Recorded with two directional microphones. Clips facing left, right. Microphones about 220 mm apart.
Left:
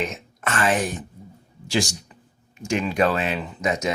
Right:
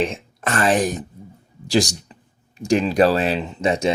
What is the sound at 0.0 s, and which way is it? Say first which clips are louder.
Speech: right 5 dB; 35° right (ahead or behind).